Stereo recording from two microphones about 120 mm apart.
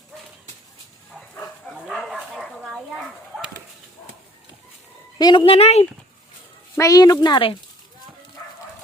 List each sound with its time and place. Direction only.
2.3 s a sound: centre (ahead or behind)
5.1 s a woman's voice: 35° left (ahead or behind)
5.5 s speech: 60° left (ahead or behind)
6.7 s speech: 25° left (ahead or behind)